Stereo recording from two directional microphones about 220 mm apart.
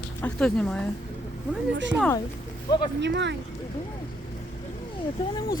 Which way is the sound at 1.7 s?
55° right (ahead or behind).